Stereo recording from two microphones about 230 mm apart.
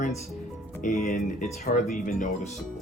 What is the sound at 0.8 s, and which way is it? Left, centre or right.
Speech, left.